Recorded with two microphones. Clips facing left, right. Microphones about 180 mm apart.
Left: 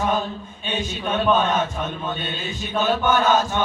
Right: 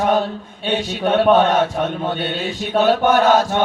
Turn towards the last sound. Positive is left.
turn(degrees=-65)  # may be behind; listen again after turning